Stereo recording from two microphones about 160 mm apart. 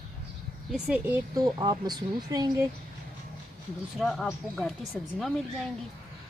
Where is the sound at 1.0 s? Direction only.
20° right (ahead or behind).